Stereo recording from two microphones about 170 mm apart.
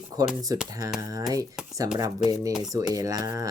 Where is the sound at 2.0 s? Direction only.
20° right (ahead or behind).